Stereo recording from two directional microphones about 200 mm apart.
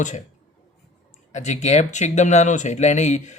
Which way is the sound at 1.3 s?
35° left (ahead or behind).